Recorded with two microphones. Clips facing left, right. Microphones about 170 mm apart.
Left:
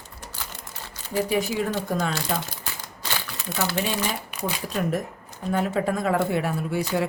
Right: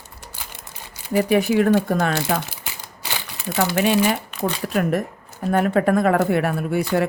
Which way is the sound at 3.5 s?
70° right (ahead or behind).